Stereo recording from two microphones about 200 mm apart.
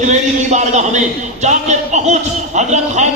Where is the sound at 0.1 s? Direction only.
35° right (ahead or behind).